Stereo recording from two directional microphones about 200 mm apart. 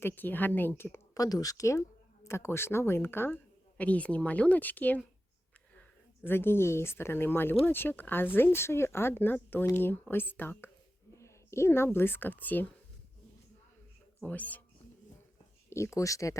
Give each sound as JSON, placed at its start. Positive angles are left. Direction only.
{"t": 0.0, "sound": "speech", "side_deg": 10}
{"t": 6.2, "sound": "speech", "side_deg": 10}
{"t": 14.2, "sound": "speech", "side_deg": 10}
{"t": 15.7, "sound": "speech", "side_deg": 15}